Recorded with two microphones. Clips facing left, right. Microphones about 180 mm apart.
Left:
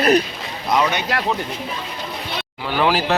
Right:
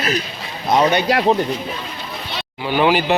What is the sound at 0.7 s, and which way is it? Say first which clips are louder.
Speech: right 4 dB; 30° right (ahead or behind).